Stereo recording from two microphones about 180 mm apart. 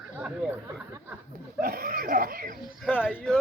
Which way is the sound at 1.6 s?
55° right (ahead or behind).